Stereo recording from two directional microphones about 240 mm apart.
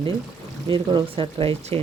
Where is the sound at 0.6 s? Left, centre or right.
Right.